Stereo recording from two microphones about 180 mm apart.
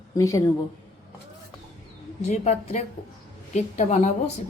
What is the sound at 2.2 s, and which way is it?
A woman's voice, 35° left (ahead or behind).